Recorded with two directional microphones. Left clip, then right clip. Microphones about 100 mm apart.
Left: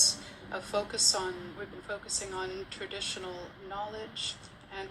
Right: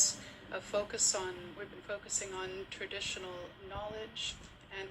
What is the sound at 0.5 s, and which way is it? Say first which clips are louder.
A woman's voice: left 3 dB; 15° left (ahead or behind).